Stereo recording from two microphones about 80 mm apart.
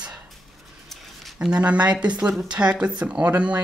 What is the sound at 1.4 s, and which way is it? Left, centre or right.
Speech, centre.